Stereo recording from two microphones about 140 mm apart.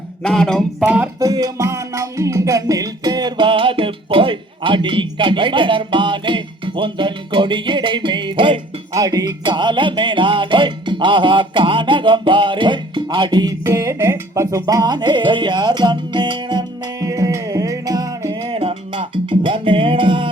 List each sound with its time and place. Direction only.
0.2 s a sound: 5° left (ahead or behind)
0.8 s music: 10° right (ahead or behind)
1.2 s music: 25° right (ahead or behind)
8.9 s music: 25° right (ahead or behind)
18.4 s music: 40° right (ahead or behind)